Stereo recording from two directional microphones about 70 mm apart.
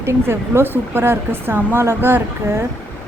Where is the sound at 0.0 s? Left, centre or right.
Right.